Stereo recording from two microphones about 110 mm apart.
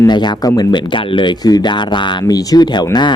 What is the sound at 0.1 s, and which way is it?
Speech, 40° left (ahead or behind).